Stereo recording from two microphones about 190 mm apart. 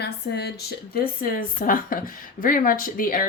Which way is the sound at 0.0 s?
60° left (ahead or behind).